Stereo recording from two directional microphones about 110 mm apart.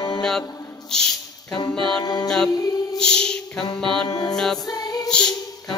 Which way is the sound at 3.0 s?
5° left (ahead or behind).